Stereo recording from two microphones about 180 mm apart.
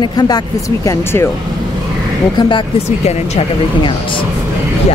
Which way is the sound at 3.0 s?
35° left (ahead or behind).